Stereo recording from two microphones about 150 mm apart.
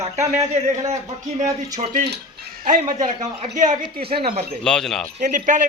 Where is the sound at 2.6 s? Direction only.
55° right (ahead or behind).